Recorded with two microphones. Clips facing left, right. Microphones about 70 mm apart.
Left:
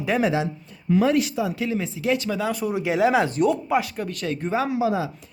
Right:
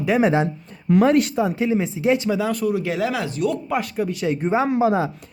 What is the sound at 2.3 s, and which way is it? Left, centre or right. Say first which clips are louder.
Speech: right 3 dB; centre.